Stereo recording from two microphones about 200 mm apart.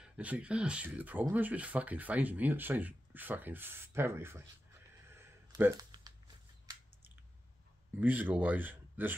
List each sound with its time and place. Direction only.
0.0 s speech: 5° right (ahead or behind)
5.1 s a sound: 10° right (ahead or behind)
8.0 s speech: 10° right (ahead or behind)